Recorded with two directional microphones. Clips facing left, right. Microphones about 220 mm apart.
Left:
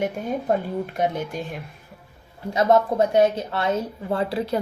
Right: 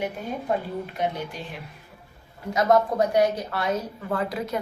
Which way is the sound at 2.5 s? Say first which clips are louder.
Left 2 dB; 25° left (ahead or behind).